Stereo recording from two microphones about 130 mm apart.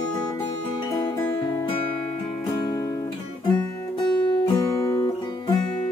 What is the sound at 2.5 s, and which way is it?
Music, 30° left (ahead or behind).